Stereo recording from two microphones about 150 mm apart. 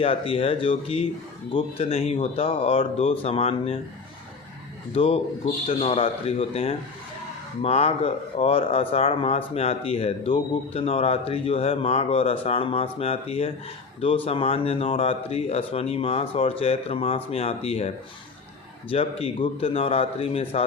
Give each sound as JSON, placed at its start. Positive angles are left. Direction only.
{"t": 0.0, "sound": "speech", "side_deg": 40}
{"t": 4.9, "sound": "speech", "side_deg": 40}